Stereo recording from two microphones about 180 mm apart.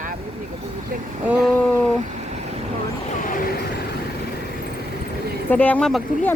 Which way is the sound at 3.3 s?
55° left (ahead or behind).